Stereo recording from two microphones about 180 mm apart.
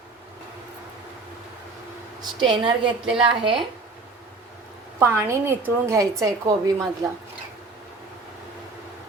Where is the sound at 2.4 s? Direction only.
25° right (ahead or behind).